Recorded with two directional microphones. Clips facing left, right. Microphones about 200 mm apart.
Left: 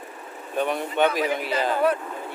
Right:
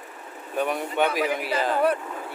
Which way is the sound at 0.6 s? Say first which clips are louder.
Left 2 dB; 10° right (ahead or behind).